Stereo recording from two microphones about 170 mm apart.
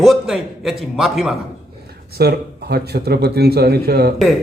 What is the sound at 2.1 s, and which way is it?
Speech, 70° right (ahead or behind).